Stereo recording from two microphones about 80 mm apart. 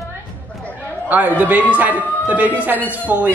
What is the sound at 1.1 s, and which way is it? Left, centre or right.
A man's voice, right.